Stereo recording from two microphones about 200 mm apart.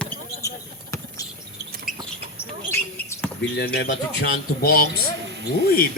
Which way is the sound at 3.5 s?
55° left (ahead or behind).